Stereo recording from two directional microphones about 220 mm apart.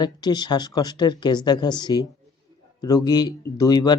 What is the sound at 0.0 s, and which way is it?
Speech, 20° left (ahead or behind).